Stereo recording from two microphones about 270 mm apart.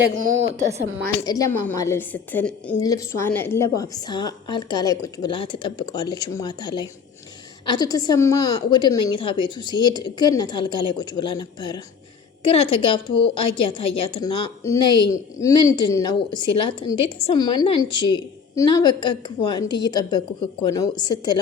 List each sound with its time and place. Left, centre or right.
1.2 s a woman's voice: centre